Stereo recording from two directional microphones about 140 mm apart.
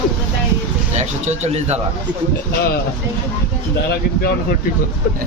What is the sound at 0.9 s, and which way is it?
Speech, 50° right (ahead or behind).